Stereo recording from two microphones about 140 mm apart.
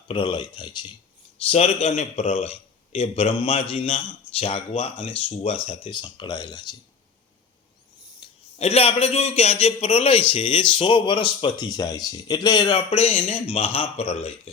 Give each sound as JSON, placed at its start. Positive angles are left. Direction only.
{"t": 0.1, "sound": "speech", "side_deg": 40}
{"t": 1.4, "sound": "a man's voice", "side_deg": 45}
{"t": 5.9, "sound": "speech", "side_deg": 35}
{"t": 8.2, "sound": "a man's voice", "side_deg": 50}